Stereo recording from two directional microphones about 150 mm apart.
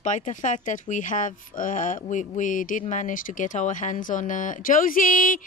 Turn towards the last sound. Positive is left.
turn(degrees=65)  # may be behind; listen again after turning